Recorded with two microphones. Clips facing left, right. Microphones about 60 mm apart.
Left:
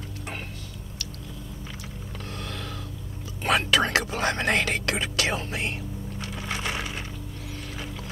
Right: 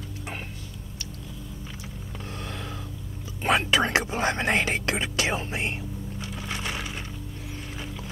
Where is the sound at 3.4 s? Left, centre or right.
Right.